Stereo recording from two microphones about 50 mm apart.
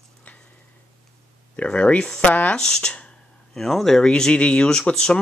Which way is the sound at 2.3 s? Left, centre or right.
Left.